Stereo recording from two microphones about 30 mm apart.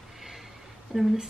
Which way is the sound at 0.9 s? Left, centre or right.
Centre.